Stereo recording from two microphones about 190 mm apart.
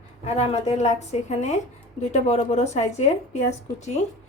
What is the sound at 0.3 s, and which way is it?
Speech, 35° left (ahead or behind).